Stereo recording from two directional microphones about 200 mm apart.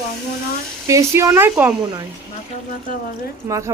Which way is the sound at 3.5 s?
15° right (ahead or behind).